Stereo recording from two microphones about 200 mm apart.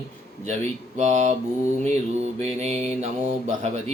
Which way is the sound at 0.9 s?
35° right (ahead or behind).